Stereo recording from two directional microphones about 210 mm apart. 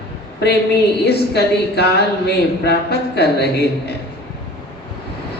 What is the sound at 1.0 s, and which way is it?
A woman's voice, 50° left (ahead or behind).